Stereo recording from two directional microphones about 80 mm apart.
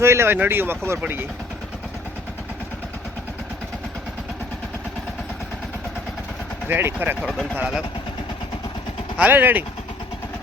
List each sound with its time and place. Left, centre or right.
0.0 s speech: right
6.7 s speech: right
7.2 s speech: centre
9.1 s speech: right